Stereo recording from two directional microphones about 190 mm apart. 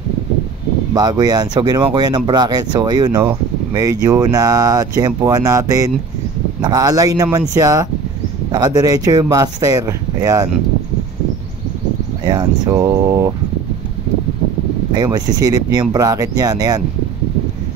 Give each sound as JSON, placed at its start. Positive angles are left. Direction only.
{"t": 0.9, "sound": "speech", "side_deg": -20}
{"t": 12.3, "sound": "speech", "side_deg": -20}
{"t": 14.9, "sound": "speech", "side_deg": -20}